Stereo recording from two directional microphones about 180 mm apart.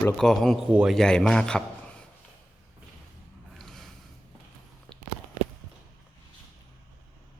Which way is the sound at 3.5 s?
Centre (ahead or behind).